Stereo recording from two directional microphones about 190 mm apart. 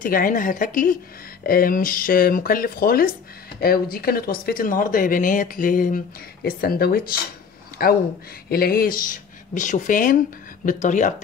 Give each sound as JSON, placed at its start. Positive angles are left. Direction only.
{"t": 0.0, "sound": "speech", "side_deg": 45}